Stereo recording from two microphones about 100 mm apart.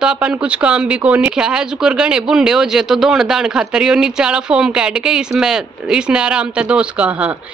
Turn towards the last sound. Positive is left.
turn(degrees=-10)  # may be behind; listen again after turning